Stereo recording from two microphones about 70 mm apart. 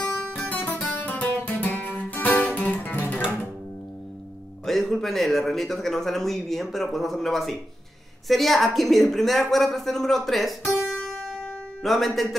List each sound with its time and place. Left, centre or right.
0.5 s guitar: left
4.6 s speech: centre
10.9 s music: centre
11.8 s speech: centre